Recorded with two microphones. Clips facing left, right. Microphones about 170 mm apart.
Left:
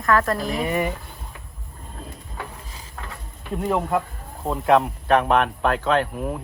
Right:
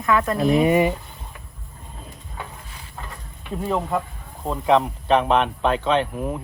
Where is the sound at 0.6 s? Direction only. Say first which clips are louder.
Right 7 dB; 20° right (ahead or behind).